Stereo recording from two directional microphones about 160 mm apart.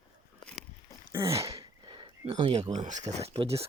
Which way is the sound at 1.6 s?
30° right (ahead or behind).